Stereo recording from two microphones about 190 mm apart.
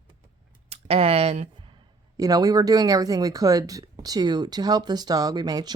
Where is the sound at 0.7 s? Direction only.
30° right (ahead or behind).